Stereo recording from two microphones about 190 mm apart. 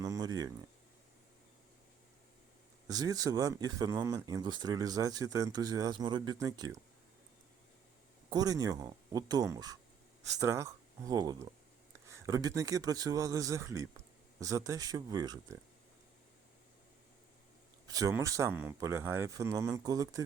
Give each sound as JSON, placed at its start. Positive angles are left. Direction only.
{"t": 0.0, "sound": "a sound", "side_deg": -20}
{"t": 2.8, "sound": "speech", "side_deg": -20}
{"t": 8.3, "sound": "speech", "side_deg": -20}
{"t": 17.8, "sound": "speech", "side_deg": -20}